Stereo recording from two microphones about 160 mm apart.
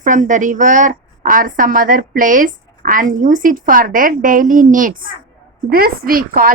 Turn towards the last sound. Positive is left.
turn(degrees=-65)  # may be behind; listen again after turning